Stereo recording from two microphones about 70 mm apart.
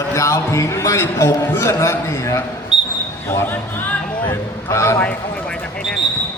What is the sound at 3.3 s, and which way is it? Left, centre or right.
A man's voice, left.